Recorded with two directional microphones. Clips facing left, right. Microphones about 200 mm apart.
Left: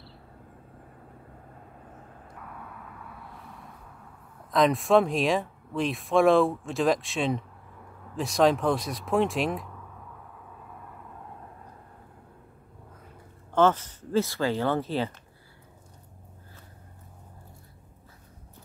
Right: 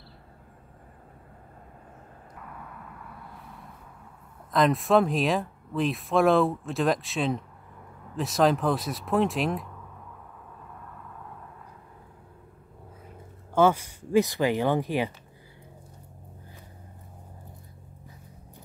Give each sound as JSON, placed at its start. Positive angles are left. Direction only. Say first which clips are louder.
{"t": 2.4, "sound": "vehicle", "louder": "even", "side_deg": 0}
{"t": 4.5, "sound": "speech", "louder": "even", "side_deg": 0}
{"t": 13.6, "sound": "speech", "louder": "right 1 dB", "side_deg": -10}